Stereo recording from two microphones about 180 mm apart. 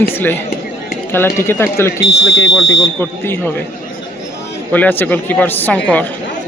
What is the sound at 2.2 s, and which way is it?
Speech, 90° left.